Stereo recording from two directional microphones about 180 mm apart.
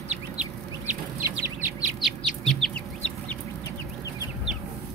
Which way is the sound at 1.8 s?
30° right (ahead or behind).